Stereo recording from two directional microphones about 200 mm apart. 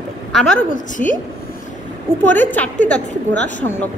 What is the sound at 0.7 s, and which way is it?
Speech, 40° left (ahead or behind).